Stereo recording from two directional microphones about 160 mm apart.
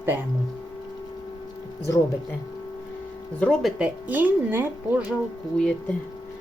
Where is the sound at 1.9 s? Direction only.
15° left (ahead or behind).